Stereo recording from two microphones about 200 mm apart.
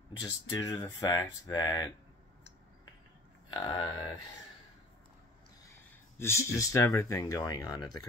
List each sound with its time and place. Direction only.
0.2 s speech: 20° left (ahead or behind)
3.4 s speech: 25° left (ahead or behind)
6.1 s speech: 15° left (ahead or behind)